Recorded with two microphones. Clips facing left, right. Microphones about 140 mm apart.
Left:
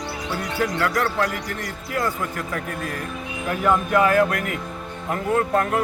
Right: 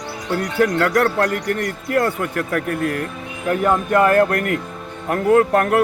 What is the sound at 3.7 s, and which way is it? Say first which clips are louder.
Speech: right 2 dB; 50° right (ahead or behind).